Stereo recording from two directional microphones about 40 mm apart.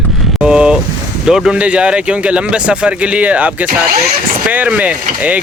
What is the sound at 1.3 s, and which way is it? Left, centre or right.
Speech, centre.